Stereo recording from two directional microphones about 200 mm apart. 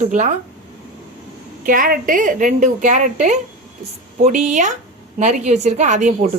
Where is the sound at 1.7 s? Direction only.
45° right (ahead or behind).